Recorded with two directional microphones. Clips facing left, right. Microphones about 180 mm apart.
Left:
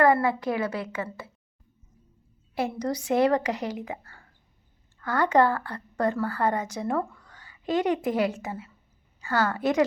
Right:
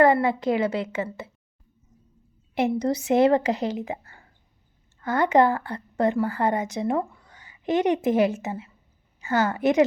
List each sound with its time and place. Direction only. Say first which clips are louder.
0.0 s a woman's voice: right 2 dB; 25° right (ahead or behind)
2.6 s a woman's voice: right 5 dB; 25° right (ahead or behind)